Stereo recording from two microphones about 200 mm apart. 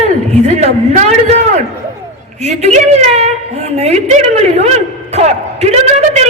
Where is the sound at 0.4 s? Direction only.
35° right (ahead or behind).